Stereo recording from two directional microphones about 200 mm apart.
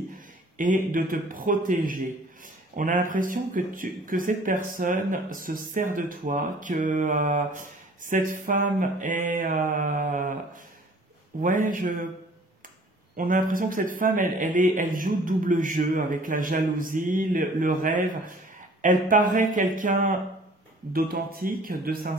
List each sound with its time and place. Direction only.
0.6 s speech: 40° right (ahead or behind)
13.1 s speech: 45° right (ahead or behind)